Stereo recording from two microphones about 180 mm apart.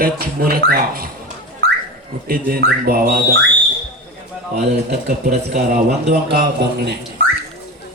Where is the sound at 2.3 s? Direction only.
55° right (ahead or behind).